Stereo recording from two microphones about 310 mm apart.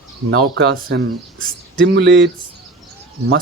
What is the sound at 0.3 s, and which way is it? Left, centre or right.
Speech, right.